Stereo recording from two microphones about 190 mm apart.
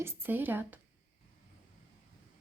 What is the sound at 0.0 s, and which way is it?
Speech, 10° right (ahead or behind).